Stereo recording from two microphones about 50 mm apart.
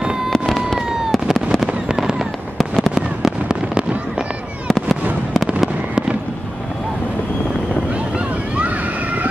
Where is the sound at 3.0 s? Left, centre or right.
Centre.